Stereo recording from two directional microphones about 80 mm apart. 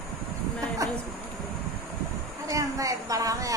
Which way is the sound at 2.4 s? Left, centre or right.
Right.